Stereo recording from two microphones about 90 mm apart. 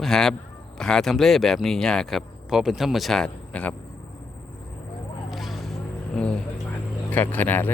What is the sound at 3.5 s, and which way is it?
Speech, 15° left (ahead or behind).